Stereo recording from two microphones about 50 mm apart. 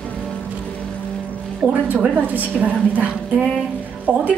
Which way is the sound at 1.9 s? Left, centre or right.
Right.